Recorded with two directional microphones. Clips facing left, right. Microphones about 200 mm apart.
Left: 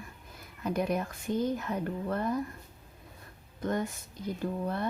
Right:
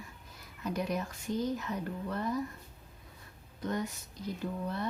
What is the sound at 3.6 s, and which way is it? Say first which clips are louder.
Speech: left 3 dB; 50° left (ahead or behind).